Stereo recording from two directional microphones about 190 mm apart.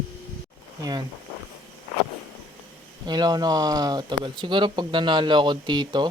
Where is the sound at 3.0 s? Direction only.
20° right (ahead or behind).